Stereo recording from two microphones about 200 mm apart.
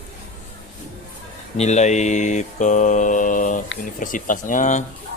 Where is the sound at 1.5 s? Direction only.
35° left (ahead or behind).